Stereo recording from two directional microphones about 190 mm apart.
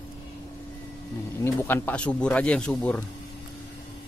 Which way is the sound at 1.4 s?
10° left (ahead or behind).